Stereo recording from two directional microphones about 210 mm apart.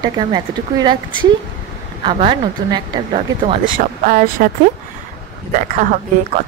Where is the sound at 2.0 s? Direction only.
25° right (ahead or behind).